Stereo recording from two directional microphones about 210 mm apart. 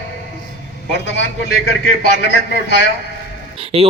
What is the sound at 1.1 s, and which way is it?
Speech, 60° left (ahead or behind).